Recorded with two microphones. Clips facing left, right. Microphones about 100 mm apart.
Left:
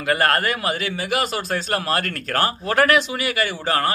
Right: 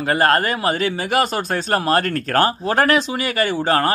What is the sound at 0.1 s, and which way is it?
A man's voice, 30° right (ahead or behind).